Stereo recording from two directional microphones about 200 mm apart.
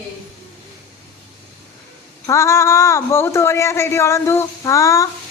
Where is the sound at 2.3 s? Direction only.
15° left (ahead or behind).